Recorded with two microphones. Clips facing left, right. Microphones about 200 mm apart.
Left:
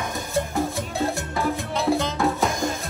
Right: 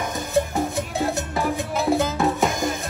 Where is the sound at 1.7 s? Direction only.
5° right (ahead or behind).